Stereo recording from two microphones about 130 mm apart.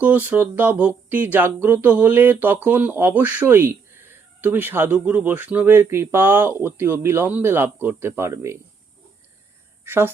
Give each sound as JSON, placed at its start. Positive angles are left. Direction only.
{"t": 0.0, "sound": "speech", "side_deg": -10}
{"t": 9.8, "sound": "speech", "side_deg": -20}